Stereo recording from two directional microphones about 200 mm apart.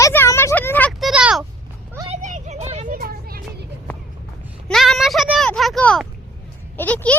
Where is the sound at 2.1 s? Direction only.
35° right (ahead or behind).